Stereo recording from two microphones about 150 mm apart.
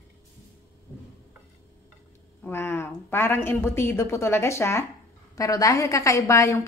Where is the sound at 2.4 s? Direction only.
15° left (ahead or behind).